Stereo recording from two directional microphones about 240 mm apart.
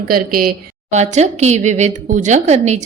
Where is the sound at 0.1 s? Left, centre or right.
Right.